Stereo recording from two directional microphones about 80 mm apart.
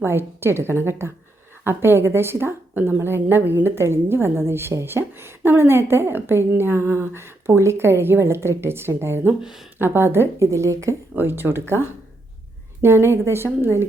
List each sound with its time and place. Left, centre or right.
0.0 s a woman's voice: right
11.1 s a woman's voice: right